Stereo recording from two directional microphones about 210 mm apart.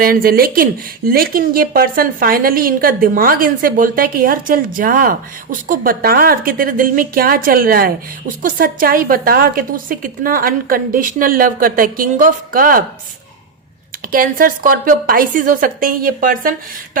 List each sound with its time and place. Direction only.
0.0 s a woman's voice: 45° right (ahead or behind)
14.1 s a woman's voice: 40° right (ahead or behind)